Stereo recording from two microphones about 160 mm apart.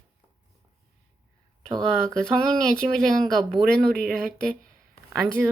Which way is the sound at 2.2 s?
5° left (ahead or behind).